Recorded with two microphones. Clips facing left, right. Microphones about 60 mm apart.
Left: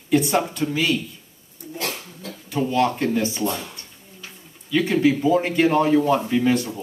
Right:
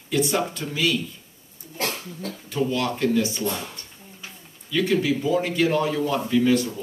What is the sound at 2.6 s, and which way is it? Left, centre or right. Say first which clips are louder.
Speech: left 3 dB; left.